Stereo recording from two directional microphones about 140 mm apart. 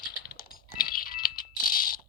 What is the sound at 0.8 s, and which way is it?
Music, 90° left.